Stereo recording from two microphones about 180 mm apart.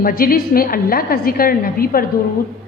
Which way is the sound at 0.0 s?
55° left (ahead or behind).